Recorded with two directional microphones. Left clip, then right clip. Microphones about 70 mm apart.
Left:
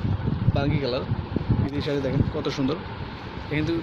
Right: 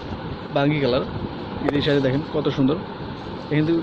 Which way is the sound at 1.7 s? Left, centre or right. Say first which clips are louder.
Right 6 dB; left.